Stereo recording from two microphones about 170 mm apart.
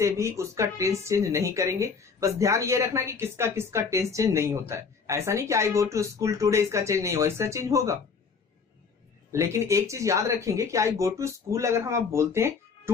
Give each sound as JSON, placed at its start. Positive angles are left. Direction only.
{"t": 0.0, "sound": "speech", "side_deg": -15}
{"t": 9.3, "sound": "speech", "side_deg": -15}